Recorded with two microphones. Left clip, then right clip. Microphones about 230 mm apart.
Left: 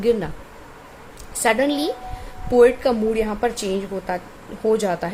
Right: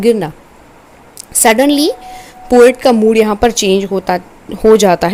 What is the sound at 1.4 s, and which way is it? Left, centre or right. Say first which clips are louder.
A woman's voice: right 10 dB; right.